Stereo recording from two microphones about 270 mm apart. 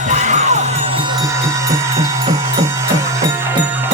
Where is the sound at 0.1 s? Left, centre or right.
Right.